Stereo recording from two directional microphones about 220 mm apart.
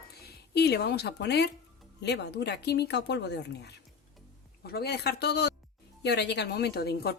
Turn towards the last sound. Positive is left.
turn(degrees=45)  # may be behind; listen again after turning